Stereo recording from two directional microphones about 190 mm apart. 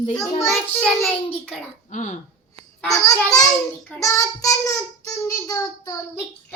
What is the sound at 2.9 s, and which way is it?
Child singing, 20° left (ahead or behind).